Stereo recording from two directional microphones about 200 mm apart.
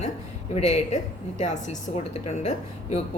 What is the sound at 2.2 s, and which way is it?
Speech, 35° left (ahead or behind).